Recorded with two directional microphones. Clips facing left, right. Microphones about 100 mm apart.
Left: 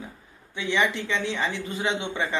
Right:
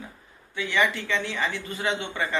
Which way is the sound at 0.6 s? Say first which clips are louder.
Even; 20° left (ahead or behind).